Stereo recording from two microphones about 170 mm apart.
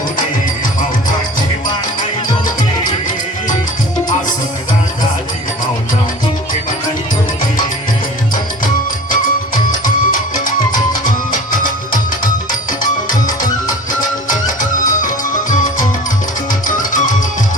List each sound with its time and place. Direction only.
9.6 s music: 50° left (ahead or behind)